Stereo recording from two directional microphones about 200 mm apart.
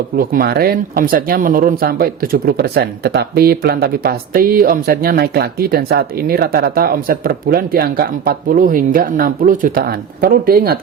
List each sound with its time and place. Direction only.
0.2 s speech: 50° right (ahead or behind)